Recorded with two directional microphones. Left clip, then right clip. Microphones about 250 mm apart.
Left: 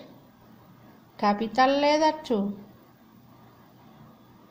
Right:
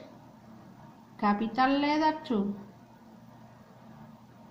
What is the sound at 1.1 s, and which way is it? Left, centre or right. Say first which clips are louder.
A woman's voice: left 5 dB; left.